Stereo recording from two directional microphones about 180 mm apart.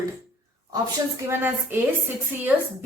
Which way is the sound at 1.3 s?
10° right (ahead or behind).